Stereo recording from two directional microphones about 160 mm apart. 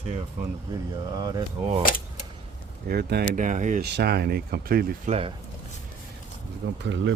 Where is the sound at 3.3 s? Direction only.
50° right (ahead or behind).